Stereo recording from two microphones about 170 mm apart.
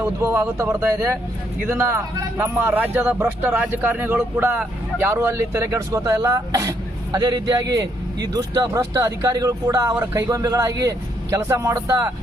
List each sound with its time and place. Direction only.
0.0 s a man's voice: 15° right (ahead or behind)